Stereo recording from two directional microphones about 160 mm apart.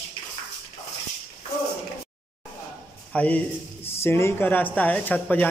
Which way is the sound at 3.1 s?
10° left (ahead or behind).